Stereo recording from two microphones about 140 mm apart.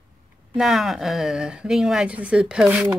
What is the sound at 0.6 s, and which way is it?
Speech, centre (ahead or behind).